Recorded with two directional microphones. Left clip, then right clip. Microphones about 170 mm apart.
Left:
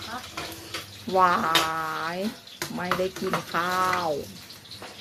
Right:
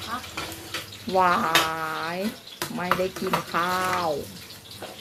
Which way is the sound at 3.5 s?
10° left (ahead or behind).